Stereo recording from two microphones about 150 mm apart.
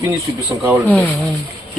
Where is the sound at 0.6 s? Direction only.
10° right (ahead or behind).